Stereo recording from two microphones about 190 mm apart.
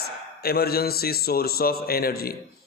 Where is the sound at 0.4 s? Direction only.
55° left (ahead or behind).